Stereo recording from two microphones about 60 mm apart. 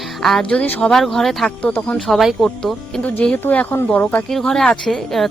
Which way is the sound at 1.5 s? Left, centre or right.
Left.